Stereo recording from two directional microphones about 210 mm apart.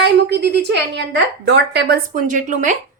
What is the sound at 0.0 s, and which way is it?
A woman's voice, 55° right (ahead or behind).